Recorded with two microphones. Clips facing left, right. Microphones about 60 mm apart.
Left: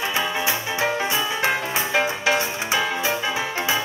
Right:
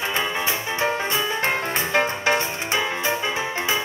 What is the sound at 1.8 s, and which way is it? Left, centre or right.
Music, right.